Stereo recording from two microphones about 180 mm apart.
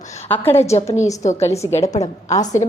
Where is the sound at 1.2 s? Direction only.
40° left (ahead or behind).